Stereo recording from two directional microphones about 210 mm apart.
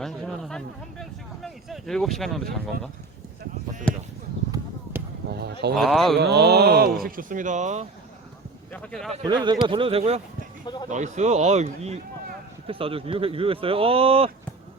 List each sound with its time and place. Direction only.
0.0 s a sound: centre (ahead or behind)
3.9 s a sound: 5° left (ahead or behind)
5.7 s speech: centre (ahead or behind)
6.1 s speech: 50° right (ahead or behind); by 7.9 s 35° right (ahead or behind)
8.7 s speech: 5° left (ahead or behind)
9.2 s a man's voice: 20° right (ahead or behind)